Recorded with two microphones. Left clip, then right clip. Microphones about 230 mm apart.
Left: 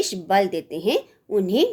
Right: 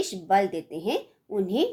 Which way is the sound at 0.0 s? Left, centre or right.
Left.